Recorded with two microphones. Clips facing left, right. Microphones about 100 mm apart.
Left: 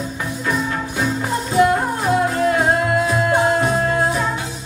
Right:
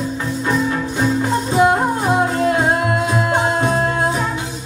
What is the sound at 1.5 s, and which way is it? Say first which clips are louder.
Music: right 1 dB; 25° right (ahead or behind).